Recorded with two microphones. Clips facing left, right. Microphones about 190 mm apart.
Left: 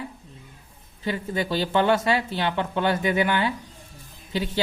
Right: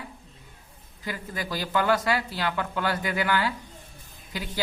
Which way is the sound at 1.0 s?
25° left (ahead or behind).